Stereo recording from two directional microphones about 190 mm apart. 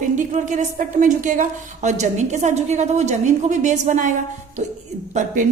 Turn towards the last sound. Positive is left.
turn(degrees=-40)  # may be behind; listen again after turning